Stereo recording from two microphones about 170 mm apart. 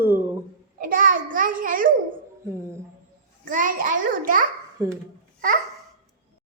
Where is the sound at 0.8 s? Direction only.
55° right (ahead or behind).